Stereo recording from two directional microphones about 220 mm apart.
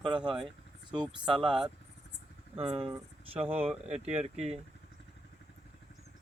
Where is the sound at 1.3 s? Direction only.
20° right (ahead or behind).